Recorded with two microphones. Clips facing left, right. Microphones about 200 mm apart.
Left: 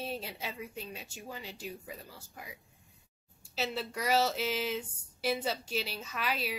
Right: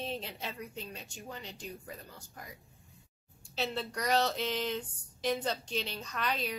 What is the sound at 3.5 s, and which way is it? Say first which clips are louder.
Speech: even; 5° left (ahead or behind).